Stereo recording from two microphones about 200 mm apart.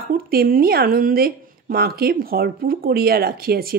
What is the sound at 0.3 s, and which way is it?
Speech, 45° right (ahead or behind).